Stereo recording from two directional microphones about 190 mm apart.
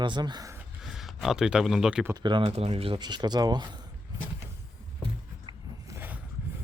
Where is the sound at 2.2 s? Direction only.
25° right (ahead or behind).